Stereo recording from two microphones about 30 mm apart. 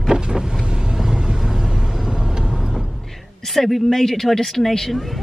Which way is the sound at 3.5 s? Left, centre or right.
Centre.